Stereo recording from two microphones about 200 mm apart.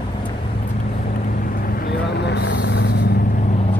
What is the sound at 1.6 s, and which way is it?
Vehicle, 50° left (ahead or behind).